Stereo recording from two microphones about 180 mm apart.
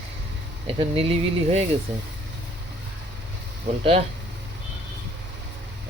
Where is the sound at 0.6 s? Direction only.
30° right (ahead or behind).